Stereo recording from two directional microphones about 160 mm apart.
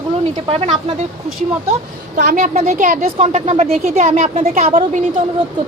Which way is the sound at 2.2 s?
50° right (ahead or behind).